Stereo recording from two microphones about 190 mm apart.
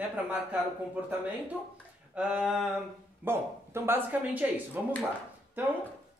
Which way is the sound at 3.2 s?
10° right (ahead or behind).